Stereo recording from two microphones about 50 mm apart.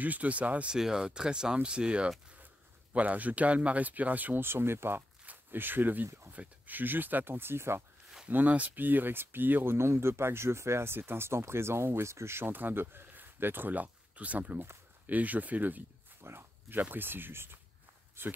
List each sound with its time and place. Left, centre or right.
0.0 s speech: right
0.7 s speech: centre; by 4.4 s right
4.4 s speech: right
5.2 s a sound: right
6.3 s speech: right
8.3 s speech: right
9.8 s speech: right
16.2 s a sound: right
16.9 s speech: right